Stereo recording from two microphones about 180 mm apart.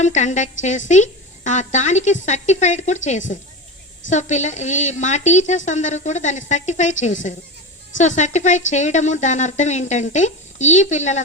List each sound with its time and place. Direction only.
0.0 s a woman's voice: 40° left (ahead or behind)